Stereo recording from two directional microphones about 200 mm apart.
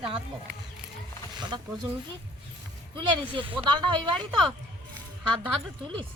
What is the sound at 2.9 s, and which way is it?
Speech, 25° right (ahead or behind).